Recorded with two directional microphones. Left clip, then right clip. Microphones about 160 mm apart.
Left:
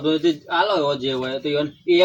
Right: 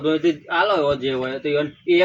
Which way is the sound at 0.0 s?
25° left (ahead or behind).